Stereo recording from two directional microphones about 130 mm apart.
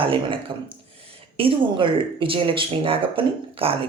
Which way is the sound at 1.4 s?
40° right (ahead or behind).